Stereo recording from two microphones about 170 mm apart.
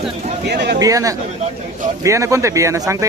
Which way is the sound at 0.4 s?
80° right.